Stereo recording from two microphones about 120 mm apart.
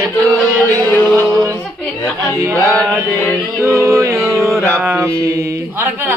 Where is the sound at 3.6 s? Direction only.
25° right (ahead or behind).